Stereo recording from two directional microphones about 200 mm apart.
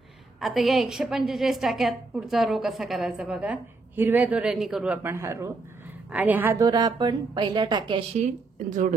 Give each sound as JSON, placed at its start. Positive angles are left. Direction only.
{"t": 0.4, "sound": "a woman's voice", "side_deg": 0}
{"t": 6.6, "sound": "a woman's voice", "side_deg": -20}
{"t": 8.6, "sound": "speech", "side_deg": -40}